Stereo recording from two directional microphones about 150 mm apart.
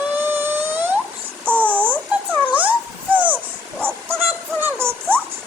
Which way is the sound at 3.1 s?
10° right (ahead or behind).